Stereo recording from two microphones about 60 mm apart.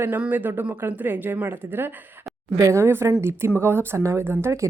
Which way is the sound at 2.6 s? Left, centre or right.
Right.